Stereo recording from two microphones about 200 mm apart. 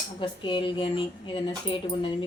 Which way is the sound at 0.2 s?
25° left (ahead or behind).